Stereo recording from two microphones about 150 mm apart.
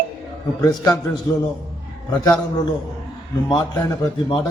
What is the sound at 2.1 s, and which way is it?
Speech, 25° left (ahead or behind).